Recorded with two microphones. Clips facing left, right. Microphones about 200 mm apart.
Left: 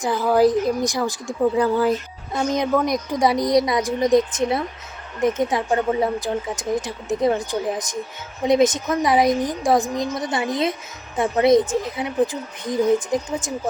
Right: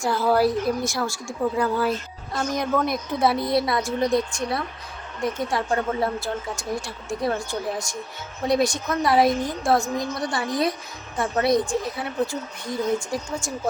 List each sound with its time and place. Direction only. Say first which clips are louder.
0.0 s speech: left 3 dB; 15° left (ahead or behind)